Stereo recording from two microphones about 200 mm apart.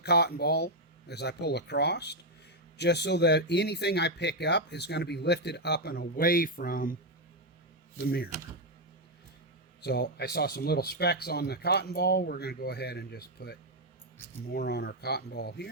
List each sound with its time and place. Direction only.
0.0 s speech: 55° left (ahead or behind)
7.9 s speech: 50° left (ahead or behind)
9.8 s speech: 55° left (ahead or behind)